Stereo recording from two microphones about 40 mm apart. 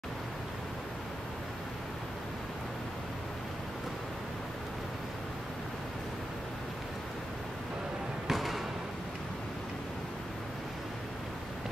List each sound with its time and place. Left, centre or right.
8.3 s basketball bounce: centre